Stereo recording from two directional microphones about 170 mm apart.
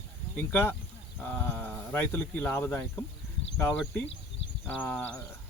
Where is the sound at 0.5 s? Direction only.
10° left (ahead or behind).